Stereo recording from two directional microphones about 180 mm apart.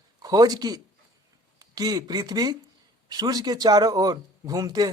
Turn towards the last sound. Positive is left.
turn(degrees=-20)  # may be behind; listen again after turning